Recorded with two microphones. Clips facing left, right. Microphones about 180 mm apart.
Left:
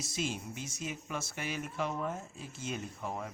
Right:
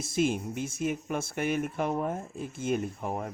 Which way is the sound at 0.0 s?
55° right (ahead or behind).